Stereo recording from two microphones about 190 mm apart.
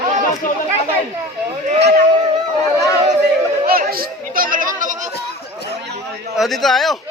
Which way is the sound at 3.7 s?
50° right (ahead or behind).